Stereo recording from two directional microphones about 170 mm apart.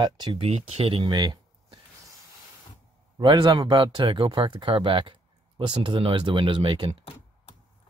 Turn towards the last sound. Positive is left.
turn(degrees=-30)  # may be behind; listen again after turning